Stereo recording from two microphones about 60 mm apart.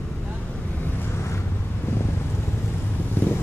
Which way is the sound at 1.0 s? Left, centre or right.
Left.